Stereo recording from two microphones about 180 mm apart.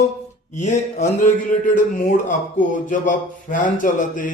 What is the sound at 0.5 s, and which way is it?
Speech, 40° left (ahead or behind).